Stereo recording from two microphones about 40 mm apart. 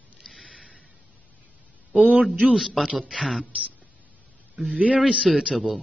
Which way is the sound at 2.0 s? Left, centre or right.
Right.